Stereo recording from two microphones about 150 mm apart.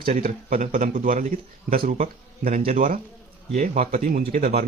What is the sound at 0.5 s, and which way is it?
Speech, 65° right (ahead or behind).